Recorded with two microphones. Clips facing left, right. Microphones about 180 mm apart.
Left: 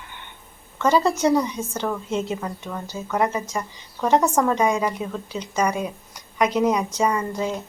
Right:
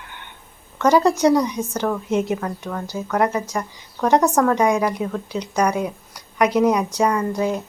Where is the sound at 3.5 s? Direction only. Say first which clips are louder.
Right 3 dB; 15° right (ahead or behind).